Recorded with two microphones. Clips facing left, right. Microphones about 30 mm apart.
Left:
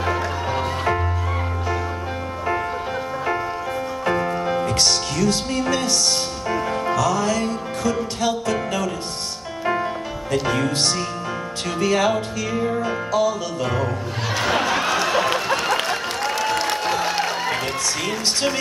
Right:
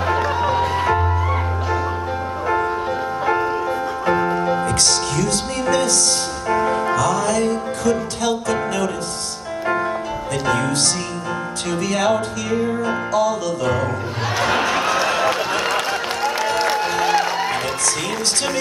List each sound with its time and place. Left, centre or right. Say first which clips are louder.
4.0 s music: right 3 dB; centre
4.6 s music: right 1 dB; centre
6.5 s music: right 6 dB; centre
6.9 s music: right 2 dB; centre
10.5 s music: right 6 dB; centre
11.8 s music: even; left
13.1 s music: right 1 dB; centre
14.4 s a sound: right 2 dB; centre